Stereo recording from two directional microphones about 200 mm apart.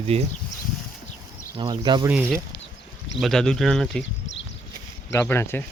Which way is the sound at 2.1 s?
5° right (ahead or behind).